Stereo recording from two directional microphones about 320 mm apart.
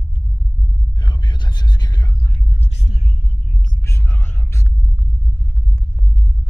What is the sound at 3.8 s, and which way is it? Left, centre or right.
Whispering, centre.